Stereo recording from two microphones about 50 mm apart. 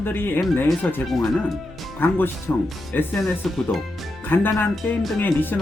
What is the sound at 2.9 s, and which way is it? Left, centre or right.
Speech, left.